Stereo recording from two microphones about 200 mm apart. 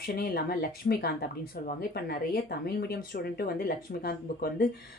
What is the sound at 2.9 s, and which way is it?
Speech, 50° left (ahead or behind).